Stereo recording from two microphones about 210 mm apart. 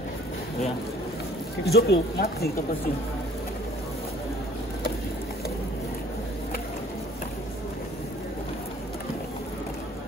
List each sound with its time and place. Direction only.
1.7 s speech: 50° left (ahead or behind)